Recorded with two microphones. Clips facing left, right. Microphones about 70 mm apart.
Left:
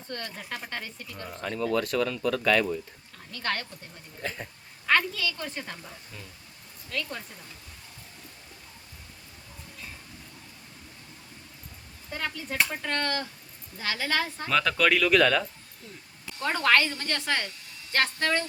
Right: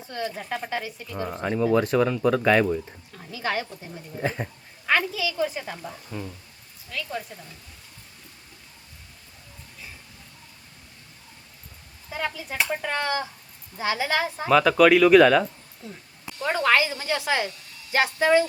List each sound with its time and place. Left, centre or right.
0.0 s a woman's voice: centre
1.8 s speech: right
3.2 s a woman's voice: centre
4.2 s speech: right
4.9 s a woman's voice: centre
6.1 s speech: right
6.9 s speech: centre
12.1 s a woman's voice: centre